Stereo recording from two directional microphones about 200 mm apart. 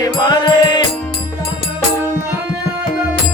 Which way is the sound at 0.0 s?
20° left (ahead or behind).